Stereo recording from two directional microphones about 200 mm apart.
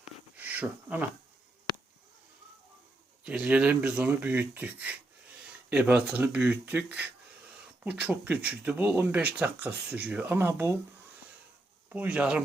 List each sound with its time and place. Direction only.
0.3 s a sound: 10° right (ahead or behind)
3.2 s speech: 5° right (ahead or behind)
11.9 s speech: 10° right (ahead or behind)